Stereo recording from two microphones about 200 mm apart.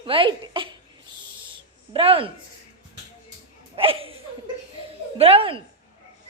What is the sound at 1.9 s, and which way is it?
Speech, 25° right (ahead or behind).